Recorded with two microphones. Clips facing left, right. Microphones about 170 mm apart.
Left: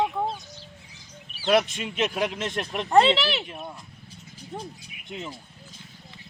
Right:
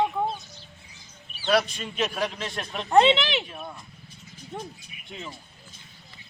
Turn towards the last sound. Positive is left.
turn(degrees=20)  # may be behind; listen again after turning